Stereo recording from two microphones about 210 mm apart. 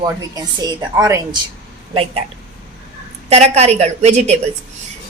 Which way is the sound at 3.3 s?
30° right (ahead or behind).